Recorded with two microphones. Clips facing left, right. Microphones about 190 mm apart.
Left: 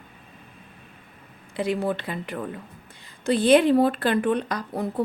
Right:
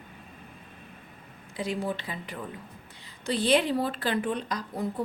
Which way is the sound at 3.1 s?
50° left (ahead or behind).